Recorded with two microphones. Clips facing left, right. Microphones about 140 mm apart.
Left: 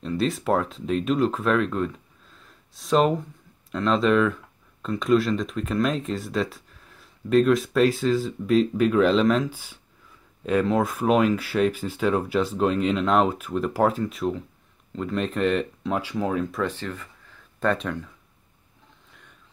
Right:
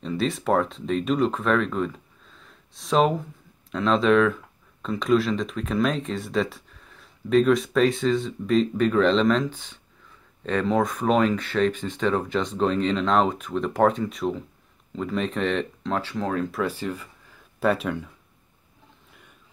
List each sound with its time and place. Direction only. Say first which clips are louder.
0.0 s speech: left 1 dB; centre (ahead or behind)
16.6 s speech: right 1 dB; 10° right (ahead or behind)